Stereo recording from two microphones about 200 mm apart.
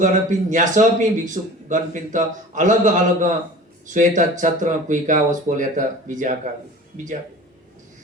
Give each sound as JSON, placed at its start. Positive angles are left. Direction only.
{"t": 0.0, "sound": "a man's voice", "side_deg": -40}